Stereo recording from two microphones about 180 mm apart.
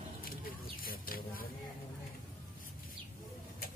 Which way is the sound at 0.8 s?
55° left (ahead or behind).